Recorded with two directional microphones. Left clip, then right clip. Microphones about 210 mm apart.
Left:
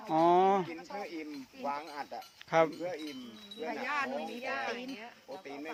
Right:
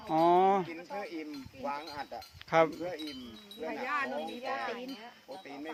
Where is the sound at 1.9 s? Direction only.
5° left (ahead or behind).